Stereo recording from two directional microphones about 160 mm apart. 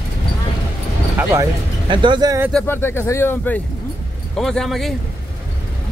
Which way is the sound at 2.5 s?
10° left (ahead or behind).